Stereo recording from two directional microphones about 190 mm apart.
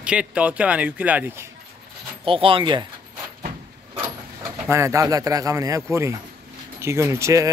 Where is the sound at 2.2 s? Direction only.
30° right (ahead or behind).